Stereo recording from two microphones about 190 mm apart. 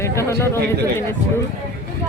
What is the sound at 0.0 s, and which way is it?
A man's voice, 15° left (ahead or behind).